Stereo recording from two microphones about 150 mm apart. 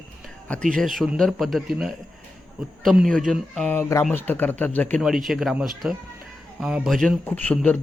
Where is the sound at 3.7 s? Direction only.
20° left (ahead or behind).